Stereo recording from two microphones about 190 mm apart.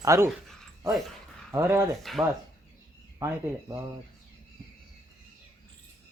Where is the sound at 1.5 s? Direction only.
15° right (ahead or behind).